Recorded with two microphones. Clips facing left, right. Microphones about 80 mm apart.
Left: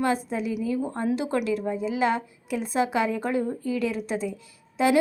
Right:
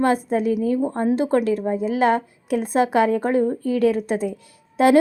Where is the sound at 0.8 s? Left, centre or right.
Right.